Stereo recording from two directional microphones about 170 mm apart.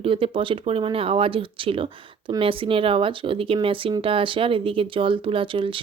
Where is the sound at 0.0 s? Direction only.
30° right (ahead or behind).